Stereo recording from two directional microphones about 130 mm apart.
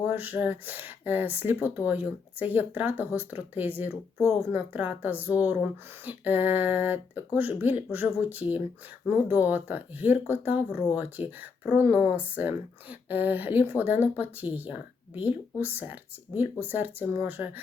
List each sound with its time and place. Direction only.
0.0 s speech: 15° right (ahead or behind)
4.2 s speech: 25° left (ahead or behind)
4.5 s speech: 10° right (ahead or behind)